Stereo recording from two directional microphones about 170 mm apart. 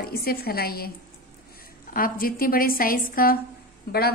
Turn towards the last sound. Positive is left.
turn(degrees=65)  # may be behind; listen again after turning